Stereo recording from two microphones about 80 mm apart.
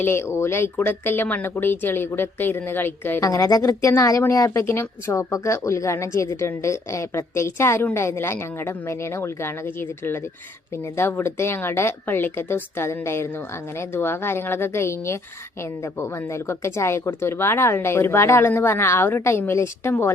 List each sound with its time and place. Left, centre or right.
0.0 s speech: left
3.2 s speech: left